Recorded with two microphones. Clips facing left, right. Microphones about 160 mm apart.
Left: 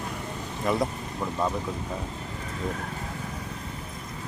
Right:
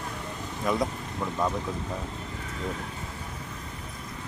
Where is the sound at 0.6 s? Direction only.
5° left (ahead or behind).